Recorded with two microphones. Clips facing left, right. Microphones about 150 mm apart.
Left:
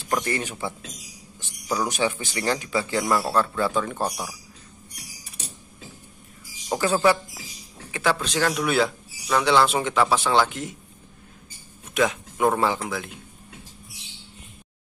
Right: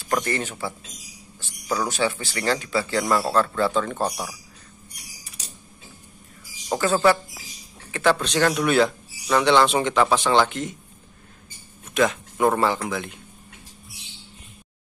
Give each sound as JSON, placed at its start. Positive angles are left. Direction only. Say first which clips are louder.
{"t": 0.0, "sound": "speech", "louder": "right 1 dB", "side_deg": 15}
{"t": 6.7, "sound": "speech", "louder": "right 1 dB", "side_deg": 10}
{"t": 11.9, "sound": "speech", "louder": "right 2 dB", "side_deg": 10}